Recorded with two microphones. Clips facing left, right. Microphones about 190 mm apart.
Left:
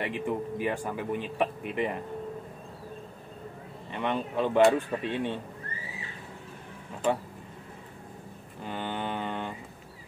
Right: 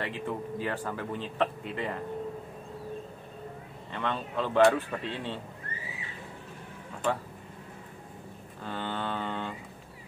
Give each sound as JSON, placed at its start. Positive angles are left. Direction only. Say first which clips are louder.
{"t": 0.0, "sound": "speech", "louder": "left 3 dB", "side_deg": 15}
{"t": 3.9, "sound": "speech", "louder": "left 3 dB", "side_deg": 15}
{"t": 8.6, "sound": "mantra", "louder": "left 1 dB", "side_deg": 15}